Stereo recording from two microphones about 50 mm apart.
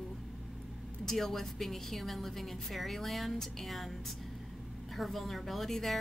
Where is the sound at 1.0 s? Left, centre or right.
Centre.